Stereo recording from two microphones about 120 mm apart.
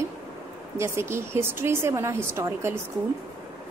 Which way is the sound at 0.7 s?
20° right (ahead or behind).